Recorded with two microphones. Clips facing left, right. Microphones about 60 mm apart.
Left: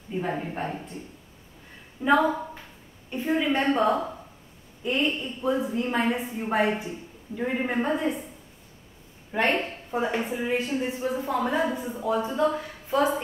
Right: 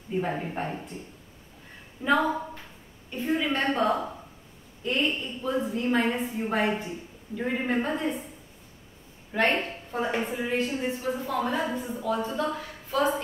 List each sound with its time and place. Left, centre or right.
0.3 s a woman's voice: centre
2.0 s a woman's voice: centre
9.3 s a woman's voice: centre
9.8 s speech: centre
10.1 s a woman's voice: centre
12.0 s a woman's voice: centre